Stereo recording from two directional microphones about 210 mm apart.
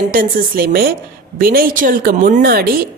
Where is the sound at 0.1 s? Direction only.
45° right (ahead or behind).